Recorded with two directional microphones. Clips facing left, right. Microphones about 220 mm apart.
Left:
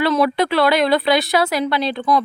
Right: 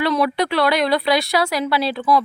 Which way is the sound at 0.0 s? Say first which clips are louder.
Left 2 dB; 25° left (ahead or behind).